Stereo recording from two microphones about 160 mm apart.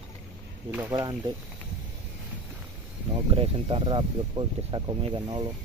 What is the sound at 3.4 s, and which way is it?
Speech, 30° right (ahead or behind).